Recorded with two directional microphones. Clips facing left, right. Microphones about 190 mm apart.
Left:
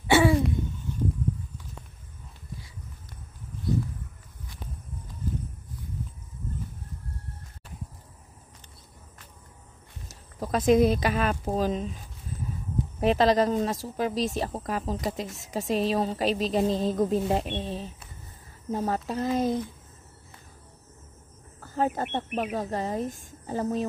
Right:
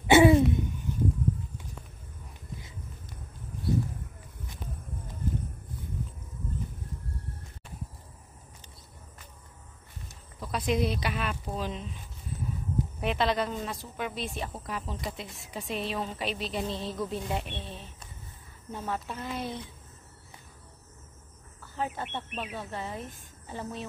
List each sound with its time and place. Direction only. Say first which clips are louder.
0.0 s a sound: right 2 dB; 20° right (ahead or behind)
10.4 s speech: left 8 dB; 45° left (ahead or behind)
13.0 s speech: left 8 dB; 40° left (ahead or behind)
21.5 s speech: left 7 dB; 40° left (ahead or behind)